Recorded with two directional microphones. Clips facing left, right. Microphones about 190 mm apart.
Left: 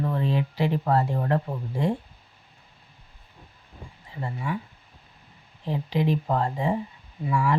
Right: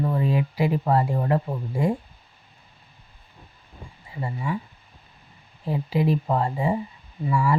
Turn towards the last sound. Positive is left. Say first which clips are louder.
# right 2 dB
turn(degrees=-5)  # may be behind; listen again after turning